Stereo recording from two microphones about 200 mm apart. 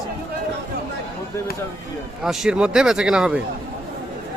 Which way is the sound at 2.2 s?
Centre (ahead or behind).